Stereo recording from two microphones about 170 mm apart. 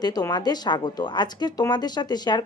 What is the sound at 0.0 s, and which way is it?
A woman's voice, 20° left (ahead or behind).